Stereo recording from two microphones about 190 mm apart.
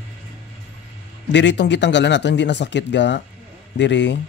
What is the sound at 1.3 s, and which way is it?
Speech, 70° left (ahead or behind).